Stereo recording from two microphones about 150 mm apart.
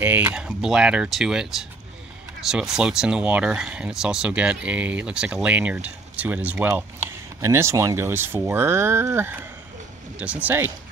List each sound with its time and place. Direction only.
0.0 s speech: 15° right (ahead or behind)